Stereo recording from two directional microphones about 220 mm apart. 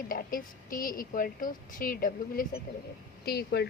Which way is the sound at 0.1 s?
40° left (ahead or behind).